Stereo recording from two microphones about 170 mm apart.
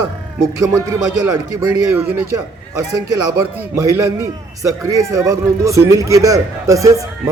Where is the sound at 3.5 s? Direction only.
20° right (ahead or behind).